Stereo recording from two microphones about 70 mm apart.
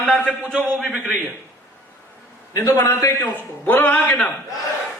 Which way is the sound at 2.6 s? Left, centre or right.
Left.